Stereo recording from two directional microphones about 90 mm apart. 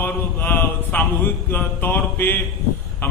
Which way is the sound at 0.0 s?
20° left (ahead or behind).